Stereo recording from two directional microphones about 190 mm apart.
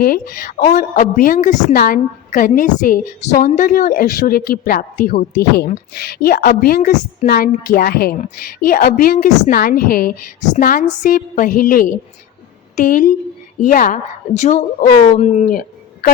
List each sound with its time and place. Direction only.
0.0 s a woman's voice: 50° left (ahead or behind)
5.3 s a woman's voice: 55° left (ahead or behind)